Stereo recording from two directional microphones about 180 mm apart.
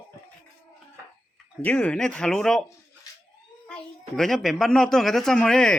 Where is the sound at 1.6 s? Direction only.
10° left (ahead or behind).